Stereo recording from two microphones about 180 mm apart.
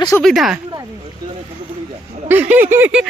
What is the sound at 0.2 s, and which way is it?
Speech, centre (ahead or behind).